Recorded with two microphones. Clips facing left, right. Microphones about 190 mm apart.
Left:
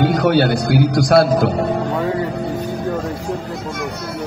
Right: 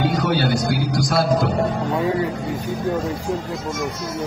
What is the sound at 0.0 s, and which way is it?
Speech, 55° left (ahead or behind).